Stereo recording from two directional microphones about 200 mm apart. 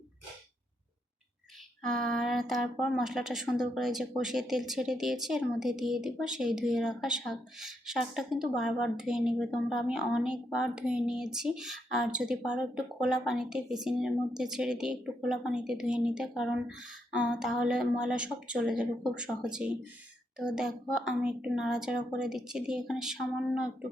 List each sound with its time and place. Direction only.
2.0 s speech: centre (ahead or behind)